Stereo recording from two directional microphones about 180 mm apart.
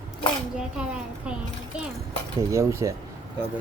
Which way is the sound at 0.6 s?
5° right (ahead or behind).